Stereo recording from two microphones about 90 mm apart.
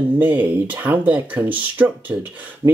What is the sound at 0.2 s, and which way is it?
Speech, 20° right (ahead or behind).